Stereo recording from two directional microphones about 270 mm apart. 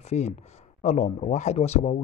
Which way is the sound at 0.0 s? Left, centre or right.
Left.